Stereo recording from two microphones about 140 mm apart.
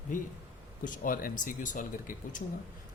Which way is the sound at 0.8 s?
75° left (ahead or behind).